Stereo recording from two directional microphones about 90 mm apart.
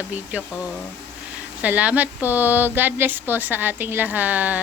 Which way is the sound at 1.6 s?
15° right (ahead or behind).